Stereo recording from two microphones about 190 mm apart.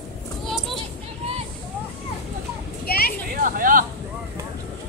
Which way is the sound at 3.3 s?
45° right (ahead or behind).